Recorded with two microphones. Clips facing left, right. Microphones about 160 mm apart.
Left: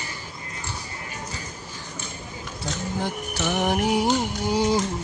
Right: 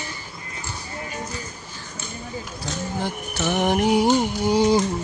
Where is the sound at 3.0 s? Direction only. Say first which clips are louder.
Right 2 dB; 10° right (ahead or behind).